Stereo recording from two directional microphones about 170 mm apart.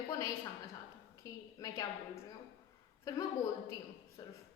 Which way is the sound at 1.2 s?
20° left (ahead or behind).